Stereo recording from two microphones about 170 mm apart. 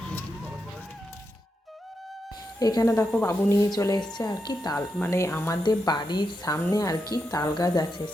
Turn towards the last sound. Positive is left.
turn(degrees=25)  # may be behind; listen again after turning